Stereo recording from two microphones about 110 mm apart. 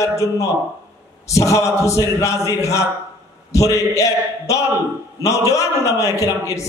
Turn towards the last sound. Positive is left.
turn(degrees=30)  # may be behind; listen again after turning